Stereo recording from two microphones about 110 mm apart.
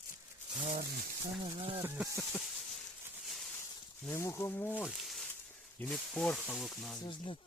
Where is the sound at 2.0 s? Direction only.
Centre (ahead or behind).